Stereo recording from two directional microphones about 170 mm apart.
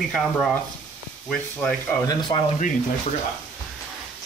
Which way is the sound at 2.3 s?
20° left (ahead or behind).